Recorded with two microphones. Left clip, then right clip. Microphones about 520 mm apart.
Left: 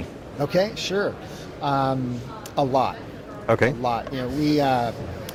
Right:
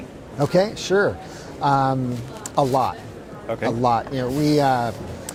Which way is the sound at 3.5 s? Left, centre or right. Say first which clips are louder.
Left 7 dB; left.